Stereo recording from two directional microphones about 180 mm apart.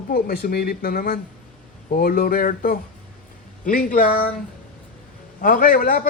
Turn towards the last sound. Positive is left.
turn(degrees=50)  # may be behind; listen again after turning